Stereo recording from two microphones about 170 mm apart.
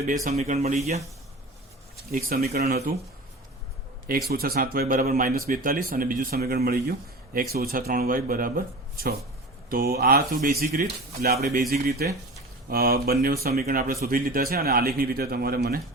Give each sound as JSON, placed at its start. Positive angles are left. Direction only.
{"t": 0.3, "sound": "speech", "side_deg": -45}
{"t": 2.1, "sound": "speech", "side_deg": -60}
{"t": 4.3, "sound": "speech", "side_deg": -65}
{"t": 10.8, "sound": "speech", "side_deg": -65}
{"t": 11.4, "sound": "speech", "side_deg": -50}